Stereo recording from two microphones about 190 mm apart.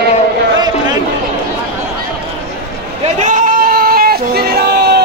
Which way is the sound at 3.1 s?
40° right (ahead or behind).